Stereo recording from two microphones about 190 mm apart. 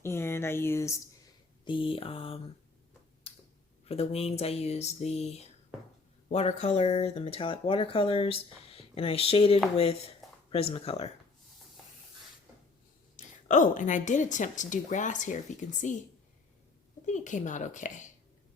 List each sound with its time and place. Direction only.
0.0 s speech: 15° left (ahead or behind)
1.6 s mantra: 25° left (ahead or behind)
3.3 s finger snapping: 30° left (ahead or behind)
3.8 s speech: 30° left (ahead or behind)
13.1 s speech: 40° left (ahead or behind)
17.1 s speech: 40° left (ahead or behind)